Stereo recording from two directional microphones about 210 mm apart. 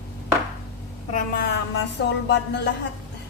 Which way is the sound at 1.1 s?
45° left (ahead or behind).